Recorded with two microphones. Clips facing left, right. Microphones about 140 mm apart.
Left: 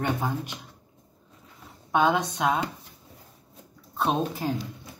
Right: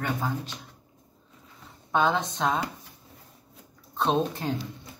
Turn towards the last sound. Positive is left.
turn(degrees=5)  # may be behind; listen again after turning